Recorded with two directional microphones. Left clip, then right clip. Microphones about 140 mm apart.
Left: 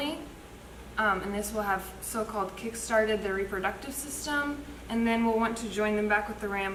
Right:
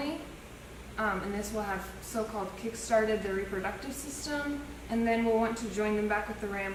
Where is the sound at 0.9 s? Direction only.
35° left (ahead or behind).